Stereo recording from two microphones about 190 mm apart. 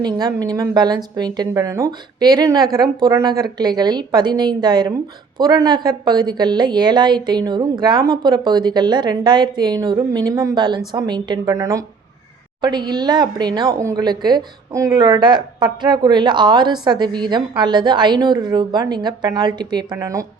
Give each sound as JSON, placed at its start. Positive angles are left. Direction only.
{"t": 0.0, "sound": "a woman's voice", "side_deg": -20}